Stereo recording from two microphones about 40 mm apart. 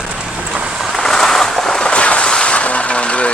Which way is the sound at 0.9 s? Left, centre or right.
Centre.